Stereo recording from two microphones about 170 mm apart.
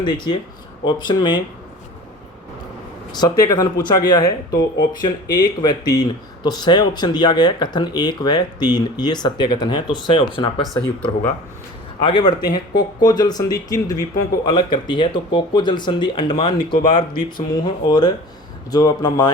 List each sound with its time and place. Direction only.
0.0 s speech: 25° left (ahead or behind)
3.1 s speech: 25° left (ahead or behind)
12.0 s speech: 25° left (ahead or behind)